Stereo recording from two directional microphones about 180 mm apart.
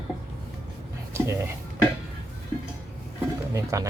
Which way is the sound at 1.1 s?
15° right (ahead or behind).